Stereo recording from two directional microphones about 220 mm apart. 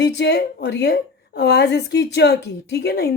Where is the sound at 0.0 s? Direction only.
50° left (ahead or behind).